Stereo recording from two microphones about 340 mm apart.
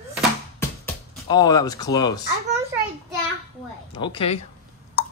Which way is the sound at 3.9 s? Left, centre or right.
Centre.